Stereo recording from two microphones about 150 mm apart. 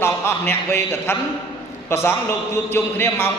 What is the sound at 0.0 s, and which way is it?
A man's voice, 15° left (ahead or behind).